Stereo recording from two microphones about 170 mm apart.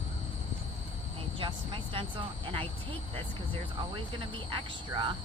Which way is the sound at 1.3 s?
30° right (ahead or behind).